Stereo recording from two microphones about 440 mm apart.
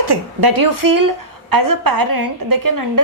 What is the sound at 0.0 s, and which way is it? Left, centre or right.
A woman's voice, right.